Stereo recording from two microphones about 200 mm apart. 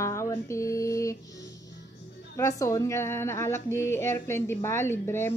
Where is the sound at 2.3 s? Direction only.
15° left (ahead or behind).